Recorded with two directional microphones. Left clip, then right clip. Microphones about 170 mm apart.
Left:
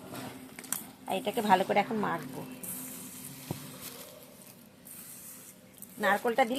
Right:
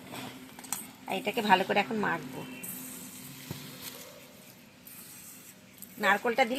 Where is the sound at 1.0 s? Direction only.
5° right (ahead or behind).